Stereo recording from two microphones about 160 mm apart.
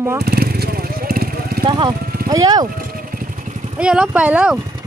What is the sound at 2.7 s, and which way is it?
Vehicle, 60° right (ahead or behind).